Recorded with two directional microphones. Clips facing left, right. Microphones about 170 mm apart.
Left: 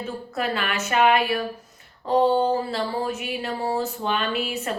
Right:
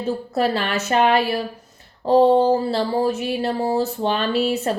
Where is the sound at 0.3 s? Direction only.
35° right (ahead or behind).